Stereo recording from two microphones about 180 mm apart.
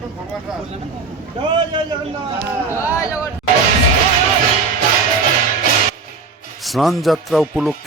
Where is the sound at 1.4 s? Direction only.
25° right (ahead or behind).